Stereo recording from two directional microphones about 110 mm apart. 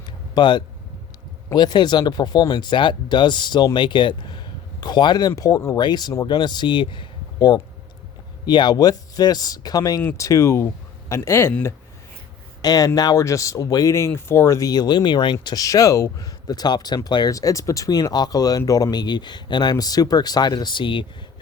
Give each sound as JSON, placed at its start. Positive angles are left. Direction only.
{"t": 0.0, "sound": "a sound", "side_deg": 45}
{"t": 1.5, "sound": "speech", "side_deg": 40}
{"t": 5.3, "sound": "speech", "side_deg": 30}
{"t": 12.6, "sound": "speech", "side_deg": 35}
{"t": 15.5, "sound": "speech", "side_deg": 30}